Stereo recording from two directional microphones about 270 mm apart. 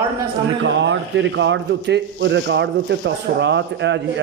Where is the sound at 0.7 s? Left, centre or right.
Right.